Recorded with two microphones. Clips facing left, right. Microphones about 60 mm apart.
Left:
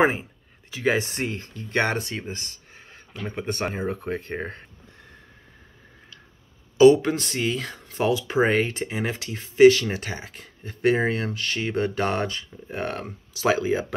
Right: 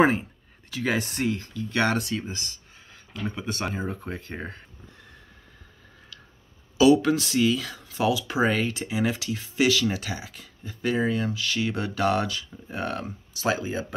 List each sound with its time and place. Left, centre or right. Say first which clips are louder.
0.0 s a sound: even; centre
0.9 s speech: even; left
6.8 s speech: left 3 dB; left
11.2 s speech: right 1 dB; left
13.5 s speech: left 4 dB; left